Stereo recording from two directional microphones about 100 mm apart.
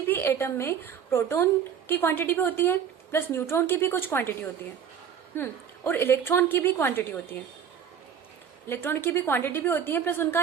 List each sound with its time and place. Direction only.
0.1 s a woman's voice: 25° left (ahead or behind)
5.4 s a woman's voice: 25° left (ahead or behind)
8.6 s a woman's voice: 20° left (ahead or behind)